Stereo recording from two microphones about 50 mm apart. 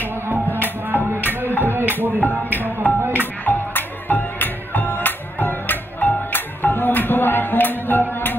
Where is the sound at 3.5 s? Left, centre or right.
Left.